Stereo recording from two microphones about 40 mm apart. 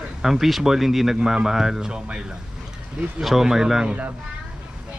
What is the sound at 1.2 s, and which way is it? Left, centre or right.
Speech, centre.